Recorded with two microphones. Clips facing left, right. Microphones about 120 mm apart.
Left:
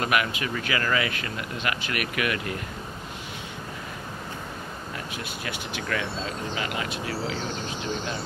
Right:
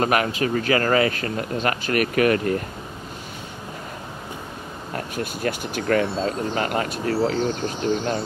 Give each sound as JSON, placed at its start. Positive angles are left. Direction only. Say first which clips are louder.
{"t": 0.0, "sound": "speech", "louder": "right 5 dB", "side_deg": -35}
{"t": 4.9, "sound": "speech", "louder": "right 10 dB", "side_deg": -45}